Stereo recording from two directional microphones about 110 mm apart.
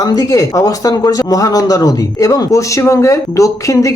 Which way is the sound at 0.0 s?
35° left (ahead or behind).